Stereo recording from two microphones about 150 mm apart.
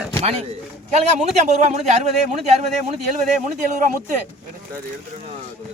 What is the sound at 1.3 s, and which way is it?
Speech, 50° right (ahead or behind).